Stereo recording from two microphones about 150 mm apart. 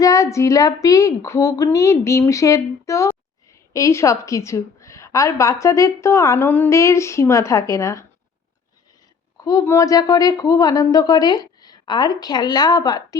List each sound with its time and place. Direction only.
0.0 s a woman's voice: 20° left (ahead or behind)
9.4 s a woman's voice: 20° left (ahead or behind)